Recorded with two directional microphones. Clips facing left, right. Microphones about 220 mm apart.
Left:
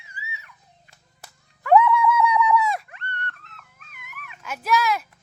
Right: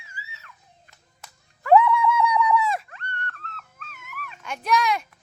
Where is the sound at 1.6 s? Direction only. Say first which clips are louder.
Even; centre (ahead or behind).